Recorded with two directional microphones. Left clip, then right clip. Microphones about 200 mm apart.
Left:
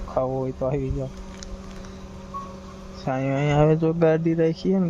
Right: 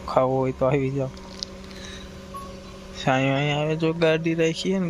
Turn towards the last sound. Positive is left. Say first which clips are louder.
# left 1 dB
turn(degrees=25)  # may be behind; listen again after turning